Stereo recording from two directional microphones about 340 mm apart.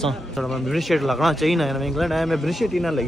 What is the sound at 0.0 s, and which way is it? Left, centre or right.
Speech, centre.